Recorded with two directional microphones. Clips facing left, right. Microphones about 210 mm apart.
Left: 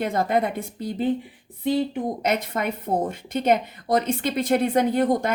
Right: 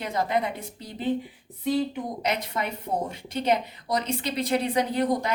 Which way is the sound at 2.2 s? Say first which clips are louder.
Left 3 dB; 50° left (ahead or behind).